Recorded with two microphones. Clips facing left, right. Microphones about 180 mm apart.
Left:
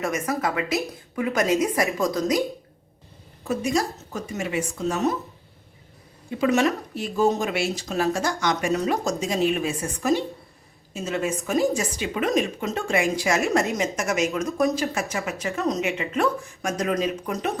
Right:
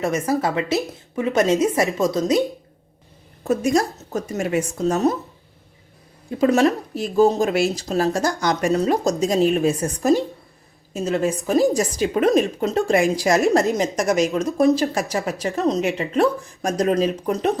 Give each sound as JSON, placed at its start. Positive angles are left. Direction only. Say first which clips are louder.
{"t": 0.0, "sound": "a woman's voice", "louder": "right 4 dB", "side_deg": -30}
{"t": 3.4, "sound": "speech", "louder": "right 5 dB", "side_deg": -45}
{"t": 6.4, "sound": "speech", "louder": "right 4 dB", "side_deg": -35}